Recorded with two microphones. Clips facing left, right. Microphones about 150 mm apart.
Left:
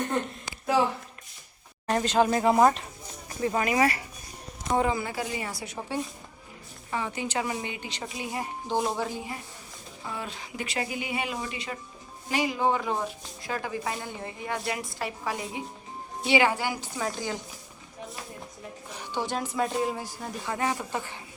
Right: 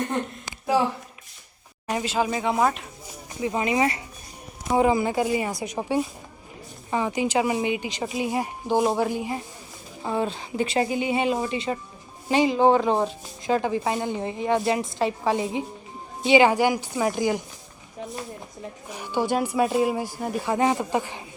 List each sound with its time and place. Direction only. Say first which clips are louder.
1.9 s speech: left 2 dB; 10° right (ahead or behind)
3.4 s speech: right 1 dB; 20° right (ahead or behind)
10.0 s speech: right 10 dB; 30° right (ahead or behind); by 17.4 s 15° right (ahead or behind)
19.3 s speech: right 7 dB; 10° right (ahead or behind)